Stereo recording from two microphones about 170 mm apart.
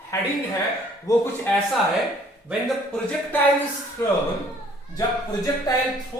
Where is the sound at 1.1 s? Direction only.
20° left (ahead or behind).